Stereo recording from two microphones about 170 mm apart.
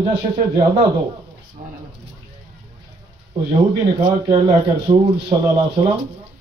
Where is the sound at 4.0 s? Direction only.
30° right (ahead or behind).